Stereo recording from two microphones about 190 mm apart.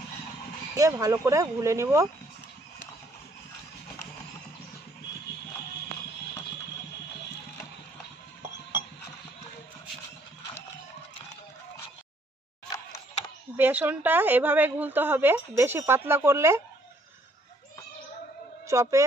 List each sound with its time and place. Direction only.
0.7 s a woman's voice: 15° right (ahead or behind)
13.6 s a woman's voice: 10° right (ahead or behind)
18.7 s a woman's voice: 15° right (ahead or behind)